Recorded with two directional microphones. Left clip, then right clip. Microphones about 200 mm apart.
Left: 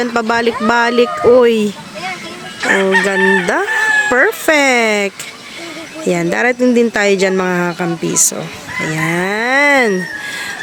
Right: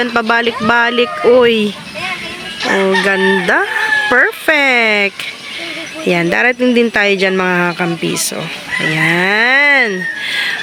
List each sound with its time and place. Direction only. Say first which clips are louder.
0.0 s livestock: right 1 dB; 5° left (ahead or behind)
2.6 s chicken: even; 5° left (ahead or behind)
3.4 s livestock: right 1 dB; 10° left (ahead or behind)